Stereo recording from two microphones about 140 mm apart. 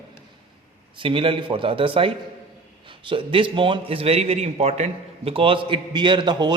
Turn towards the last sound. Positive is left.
turn(degrees=-30)  # may be behind; listen again after turning